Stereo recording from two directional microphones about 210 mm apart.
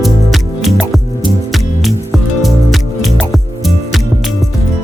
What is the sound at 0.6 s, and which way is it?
Music, centre (ahead or behind).